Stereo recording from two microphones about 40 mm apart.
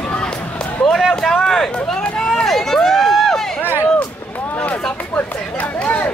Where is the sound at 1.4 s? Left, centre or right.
Centre.